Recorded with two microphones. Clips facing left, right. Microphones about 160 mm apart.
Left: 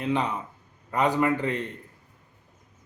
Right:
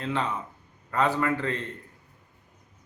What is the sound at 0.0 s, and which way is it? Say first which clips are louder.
A man's voice: left 3 dB; 15° left (ahead or behind).